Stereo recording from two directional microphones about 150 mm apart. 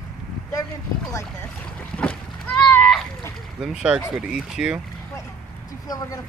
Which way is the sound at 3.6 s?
5° right (ahead or behind).